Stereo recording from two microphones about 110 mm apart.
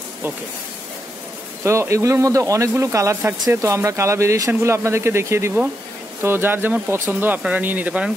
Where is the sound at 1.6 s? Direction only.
25° right (ahead or behind).